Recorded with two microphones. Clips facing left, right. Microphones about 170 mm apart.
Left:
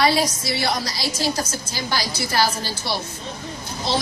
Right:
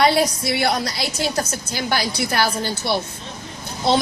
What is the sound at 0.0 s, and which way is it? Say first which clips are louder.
A woman's voice: right 3 dB; 60° right (ahead or behind).